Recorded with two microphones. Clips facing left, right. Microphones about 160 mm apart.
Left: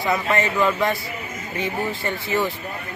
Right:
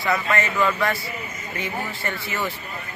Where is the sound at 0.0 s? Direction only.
20° left (ahead or behind).